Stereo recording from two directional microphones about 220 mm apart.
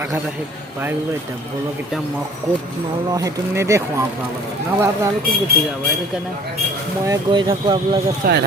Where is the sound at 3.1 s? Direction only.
15° right (ahead or behind).